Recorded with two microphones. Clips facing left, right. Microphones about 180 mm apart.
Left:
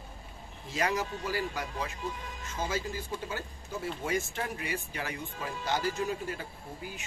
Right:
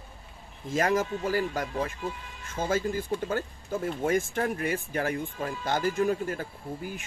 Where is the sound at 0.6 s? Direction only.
45° right (ahead or behind).